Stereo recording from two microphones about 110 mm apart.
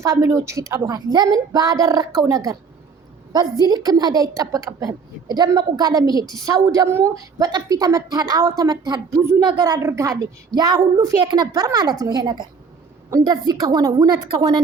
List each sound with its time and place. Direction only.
0.0 s a woman's voice: 30° right (ahead or behind)
0.9 s a child's voice: 40° right (ahead or behind)